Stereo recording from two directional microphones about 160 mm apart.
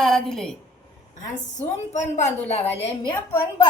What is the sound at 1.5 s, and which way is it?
A woman's voice, 45° left (ahead or behind).